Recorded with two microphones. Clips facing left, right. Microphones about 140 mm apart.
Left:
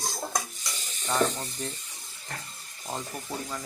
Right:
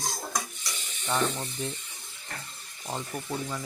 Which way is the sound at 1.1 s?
5° right (ahead or behind).